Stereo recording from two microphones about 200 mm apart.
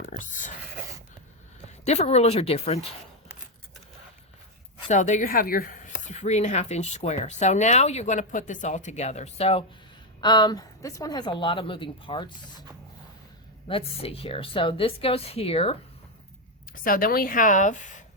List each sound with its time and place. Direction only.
0.0 s speech: 40° left (ahead or behind)
1.8 s speech: 35° left (ahead or behind)
4.9 s speech: 35° left (ahead or behind)
13.7 s speech: 30° left (ahead or behind)
16.8 s a woman's voice: 45° left (ahead or behind)